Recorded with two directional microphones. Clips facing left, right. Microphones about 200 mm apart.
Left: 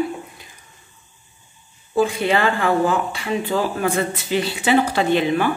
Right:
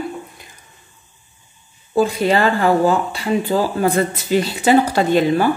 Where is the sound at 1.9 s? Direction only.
40° right (ahead or behind).